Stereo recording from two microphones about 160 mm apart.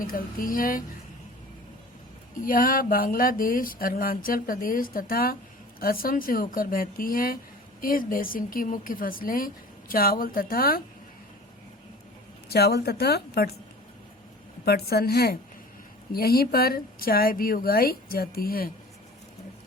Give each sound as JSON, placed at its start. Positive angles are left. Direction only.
{"t": 0.0, "sound": "speech", "side_deg": 60}
{"t": 2.4, "sound": "speech", "side_deg": 60}
{"t": 12.5, "sound": "a woman's voice", "side_deg": 85}
{"t": 14.6, "sound": "a woman's voice", "side_deg": 80}